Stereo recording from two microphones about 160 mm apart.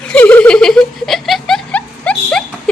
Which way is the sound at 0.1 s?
10° left (ahead or behind).